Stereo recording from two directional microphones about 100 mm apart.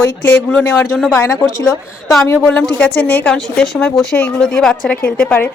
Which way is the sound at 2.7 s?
15° left (ahead or behind).